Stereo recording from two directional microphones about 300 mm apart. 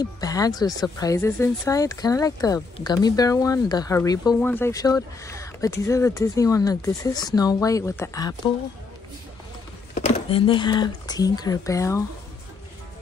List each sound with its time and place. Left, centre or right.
0.0 s speech: centre
9.9 s a sound: left
11.1 s speech: centre